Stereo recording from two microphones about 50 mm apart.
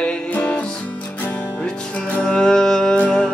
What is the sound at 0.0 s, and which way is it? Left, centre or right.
Music, left.